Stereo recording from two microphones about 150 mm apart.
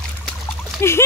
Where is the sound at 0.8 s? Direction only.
15° left (ahead or behind).